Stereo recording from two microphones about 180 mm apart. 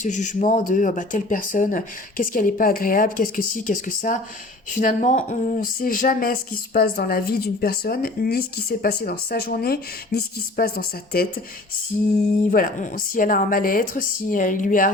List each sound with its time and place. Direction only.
0.0 s speech: 45° left (ahead or behind)
12.5 s speech: 50° left (ahead or behind)